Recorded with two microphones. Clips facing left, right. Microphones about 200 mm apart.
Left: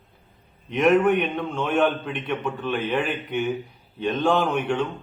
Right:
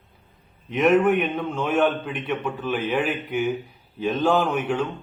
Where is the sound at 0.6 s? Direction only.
Centre (ahead or behind).